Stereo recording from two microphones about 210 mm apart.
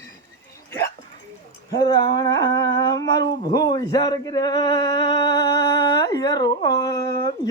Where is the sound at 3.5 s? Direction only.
20° left (ahead or behind).